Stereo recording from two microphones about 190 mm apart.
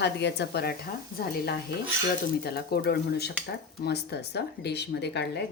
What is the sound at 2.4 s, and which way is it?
Speech, 55° left (ahead or behind).